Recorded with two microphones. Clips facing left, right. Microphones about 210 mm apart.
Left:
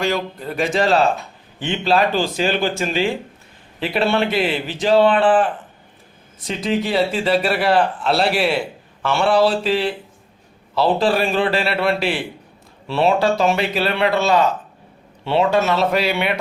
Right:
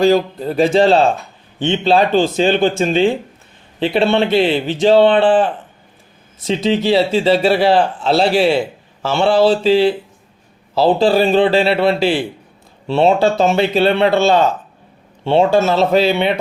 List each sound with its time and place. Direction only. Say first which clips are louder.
0.0 s speech: right 9 dB; 30° right (ahead or behind)
6.5 s speech: right 6 dB; 25° right (ahead or behind)